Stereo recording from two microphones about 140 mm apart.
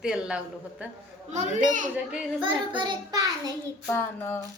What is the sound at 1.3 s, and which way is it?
Speech, 60° right (ahead or behind).